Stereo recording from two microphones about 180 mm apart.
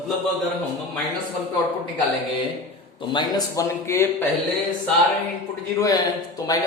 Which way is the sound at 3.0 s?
25° left (ahead or behind).